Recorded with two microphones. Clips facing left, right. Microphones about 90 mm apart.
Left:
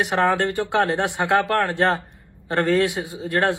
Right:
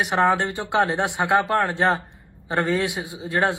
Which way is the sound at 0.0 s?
20° right (ahead or behind).